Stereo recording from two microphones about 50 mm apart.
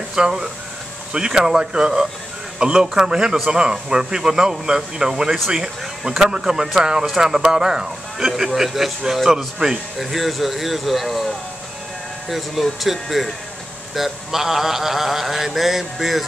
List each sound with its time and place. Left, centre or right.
0.1 s speech: centre
12.3 s speech: centre